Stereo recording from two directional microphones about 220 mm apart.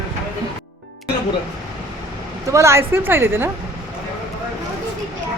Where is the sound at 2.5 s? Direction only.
15° right (ahead or behind).